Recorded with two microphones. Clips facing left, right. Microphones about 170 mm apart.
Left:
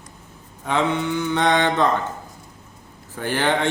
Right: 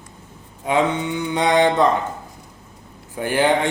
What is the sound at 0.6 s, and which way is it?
Mantra, 15° right (ahead or behind).